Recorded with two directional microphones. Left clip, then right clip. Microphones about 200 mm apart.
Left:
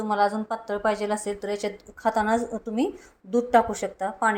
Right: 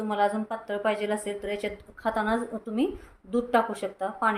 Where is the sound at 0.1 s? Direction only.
25° left (ahead or behind).